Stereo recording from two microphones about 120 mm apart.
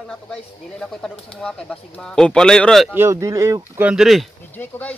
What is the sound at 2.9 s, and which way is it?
Speech, 25° right (ahead or behind).